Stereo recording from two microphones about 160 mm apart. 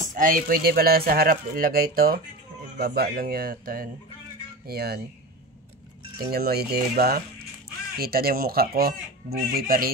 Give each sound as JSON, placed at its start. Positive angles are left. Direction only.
{"t": 0.1, "sound": "speech", "side_deg": -60}
{"t": 4.6, "sound": "speech", "side_deg": -80}
{"t": 6.3, "sound": "speech", "side_deg": -75}